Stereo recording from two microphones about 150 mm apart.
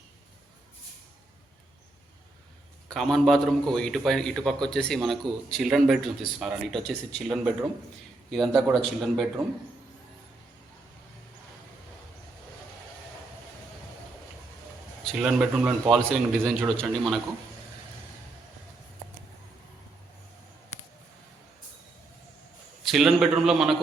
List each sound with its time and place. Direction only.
2.9 s a man's voice: centre (ahead or behind)
7.3 s a man's voice: 10° right (ahead or behind)
15.0 s a man's voice: 5° right (ahead or behind)
16.0 s a man's voice: 5° left (ahead or behind)
20.7 s a sound: 50° left (ahead or behind)
22.8 s a man's voice: centre (ahead or behind)